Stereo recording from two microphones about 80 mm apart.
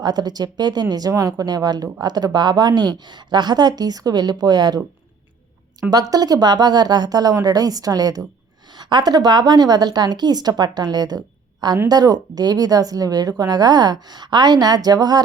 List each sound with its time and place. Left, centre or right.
0.0 s speech: right
5.9 s speech: right
8.7 s a woman's voice: right